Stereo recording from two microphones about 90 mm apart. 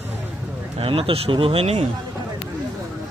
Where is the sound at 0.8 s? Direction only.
85° right.